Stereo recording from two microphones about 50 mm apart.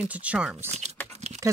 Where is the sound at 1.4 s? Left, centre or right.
Right.